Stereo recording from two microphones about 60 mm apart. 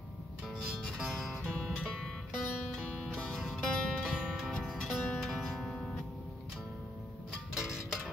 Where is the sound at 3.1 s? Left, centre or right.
Centre.